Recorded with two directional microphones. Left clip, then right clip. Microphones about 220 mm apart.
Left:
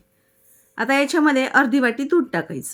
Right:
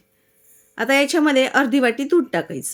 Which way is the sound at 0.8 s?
20° left (ahead or behind).